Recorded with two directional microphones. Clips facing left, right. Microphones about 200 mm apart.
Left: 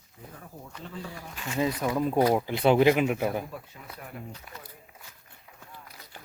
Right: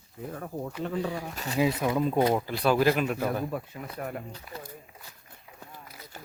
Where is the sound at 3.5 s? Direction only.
55° right (ahead or behind).